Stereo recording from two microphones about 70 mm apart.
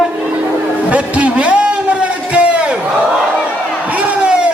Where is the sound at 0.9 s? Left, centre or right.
Centre.